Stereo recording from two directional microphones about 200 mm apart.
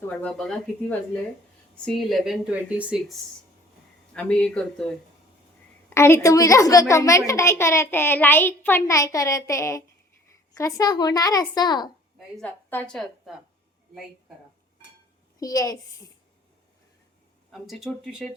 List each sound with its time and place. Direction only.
0.1 s speech: 5° left (ahead or behind)
4.1 s speech: 5° left (ahead or behind)
5.9 s a woman's voice: 15° left (ahead or behind)
12.4 s a woman's voice: 5° left (ahead or behind)
15.4 s a woman's voice: 20° left (ahead or behind)
17.5 s speech: centre (ahead or behind)